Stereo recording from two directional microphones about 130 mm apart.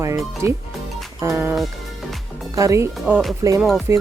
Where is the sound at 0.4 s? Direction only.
20° right (ahead or behind).